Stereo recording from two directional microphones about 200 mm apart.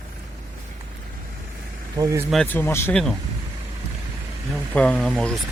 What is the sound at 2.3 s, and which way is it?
Speech, 5° left (ahead or behind).